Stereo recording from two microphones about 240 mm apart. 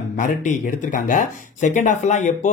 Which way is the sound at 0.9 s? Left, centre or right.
Left.